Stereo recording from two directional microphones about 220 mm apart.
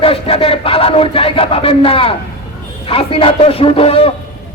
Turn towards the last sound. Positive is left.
turn(degrees=25)  # may be behind; listen again after turning